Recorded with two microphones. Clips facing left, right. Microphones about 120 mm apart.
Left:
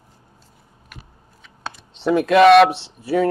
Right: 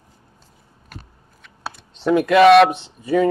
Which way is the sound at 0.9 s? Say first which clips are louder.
Right 4 dB; 35° right (ahead or behind).